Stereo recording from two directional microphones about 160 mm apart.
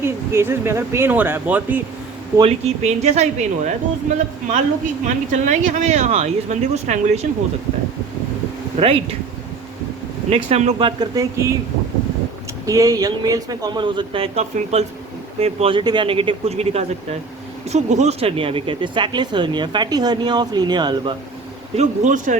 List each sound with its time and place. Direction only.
0.0 s speech: 15° right (ahead or behind)
2.4 s speech: 45° right (ahead or behind)
5.0 s speech: 50° right (ahead or behind)
8.8 s speech: 35° right (ahead or behind)
10.2 s speech: 40° right (ahead or behind); by 11.5 s 20° right (ahead or behind)
12.6 s speech: 20° right (ahead or behind)
21.8 s speech: 50° right (ahead or behind)